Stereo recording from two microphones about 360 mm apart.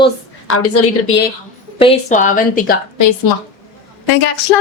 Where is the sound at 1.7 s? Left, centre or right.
Centre.